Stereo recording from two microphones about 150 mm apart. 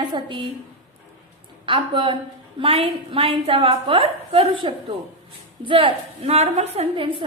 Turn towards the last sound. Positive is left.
turn(degrees=-35)  # may be behind; listen again after turning